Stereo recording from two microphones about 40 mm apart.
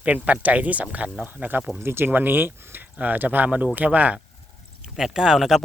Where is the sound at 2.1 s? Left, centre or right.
Right.